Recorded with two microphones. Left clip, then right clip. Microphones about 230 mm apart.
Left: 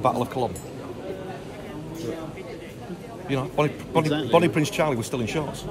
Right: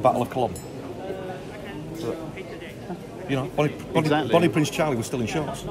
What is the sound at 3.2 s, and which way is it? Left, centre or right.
Speech, centre.